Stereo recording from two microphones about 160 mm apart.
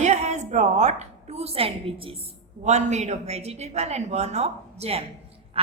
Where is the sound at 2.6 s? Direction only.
45° right (ahead or behind).